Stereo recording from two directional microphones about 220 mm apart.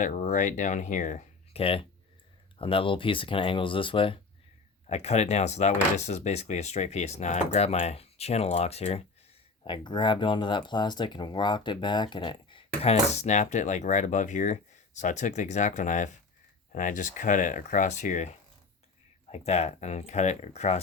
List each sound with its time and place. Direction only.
0.0 s speech: 35° left (ahead or behind)